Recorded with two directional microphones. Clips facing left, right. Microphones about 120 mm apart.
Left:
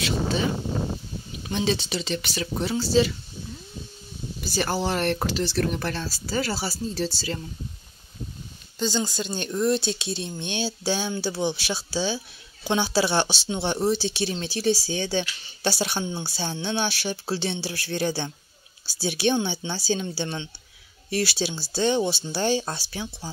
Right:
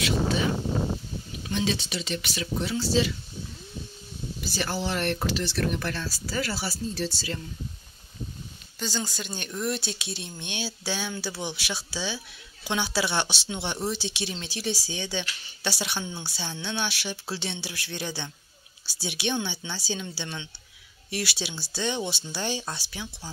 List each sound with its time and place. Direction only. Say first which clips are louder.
0.0 s a sound: even; 30° left (ahead or behind)
1.5 s speech: left 3 dB; 35° left (ahead or behind)
4.6 s speech: left 4 dB; 40° left (ahead or behind)
8.7 s speech: left 6 dB; 20° left (ahead or behind)